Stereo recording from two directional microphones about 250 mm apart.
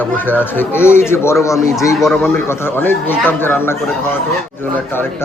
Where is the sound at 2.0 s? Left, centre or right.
Centre.